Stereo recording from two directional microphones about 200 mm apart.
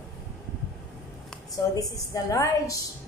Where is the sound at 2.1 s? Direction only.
15° left (ahead or behind).